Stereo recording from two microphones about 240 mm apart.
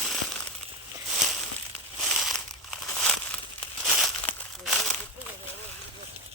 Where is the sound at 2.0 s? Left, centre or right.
Centre.